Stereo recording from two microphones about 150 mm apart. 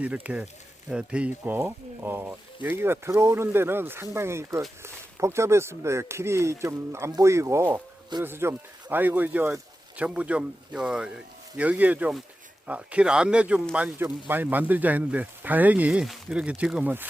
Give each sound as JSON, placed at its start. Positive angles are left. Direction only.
{"t": 0.0, "sound": "speech", "side_deg": -10}